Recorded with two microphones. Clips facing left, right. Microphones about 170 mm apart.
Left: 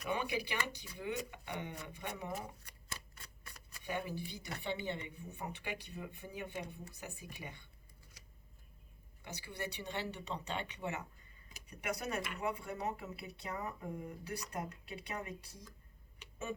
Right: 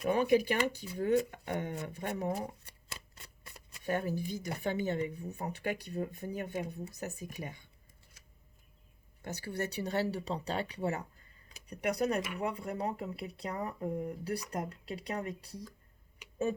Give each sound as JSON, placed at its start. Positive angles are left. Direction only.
{"t": 0.1, "sound": "speech", "side_deg": -45}
{"t": 3.2, "sound": "a sound", "side_deg": -25}
{"t": 3.8, "sound": "speech", "side_deg": -45}
{"t": 9.2, "sound": "speech", "side_deg": -45}